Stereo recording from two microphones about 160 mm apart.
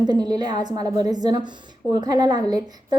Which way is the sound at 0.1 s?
25° right (ahead or behind).